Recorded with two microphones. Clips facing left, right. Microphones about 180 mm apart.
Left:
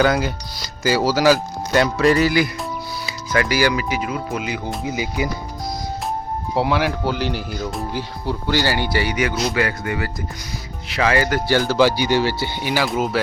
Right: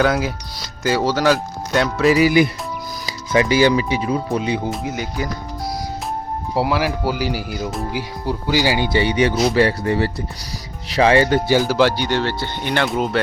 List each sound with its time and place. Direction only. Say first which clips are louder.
0.0 s speech: even; centre (ahead or behind)
3.3 s speech: right 4 dB; 25° right (ahead or behind)
4.7 s speech: even; centre (ahead or behind)
6.5 s speech: even; 5° right (ahead or behind); by 11.5 s 25° right (ahead or behind)
11.5 s speech: even; 10° right (ahead or behind)
11.8 s speech: left 1 dB; 5° left (ahead or behind)